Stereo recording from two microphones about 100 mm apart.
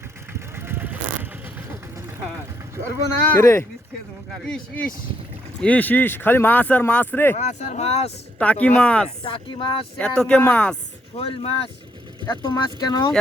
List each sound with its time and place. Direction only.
0.3 s vehicle: 25° right (ahead or behind)
2.7 s vehicle: 25° right (ahead or behind)
3.2 s speech: 25° left (ahead or behind)
4.3 s speech: 5° left (ahead or behind)
7.3 s speech: 90° left
8.4 s speech: 15° left (ahead or behind)
9.2 s speech: 55° left (ahead or behind)
10.0 s speech: 10° left (ahead or behind)
11.2 s speech: 70° left (ahead or behind)
12.2 s speech: 45° left (ahead or behind)